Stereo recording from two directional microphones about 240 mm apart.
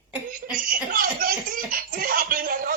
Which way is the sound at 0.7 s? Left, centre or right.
Right.